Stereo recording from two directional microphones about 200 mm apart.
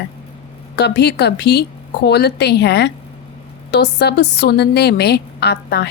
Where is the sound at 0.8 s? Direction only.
55° left (ahead or behind).